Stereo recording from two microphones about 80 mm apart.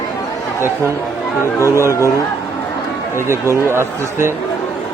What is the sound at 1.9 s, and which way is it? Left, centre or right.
Speech, left.